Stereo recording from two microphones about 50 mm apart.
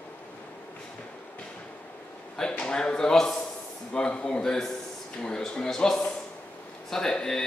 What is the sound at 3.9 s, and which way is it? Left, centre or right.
Speech, centre.